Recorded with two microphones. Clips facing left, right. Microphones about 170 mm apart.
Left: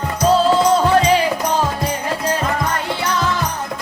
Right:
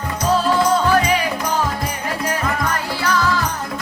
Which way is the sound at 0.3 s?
25° left (ahead or behind).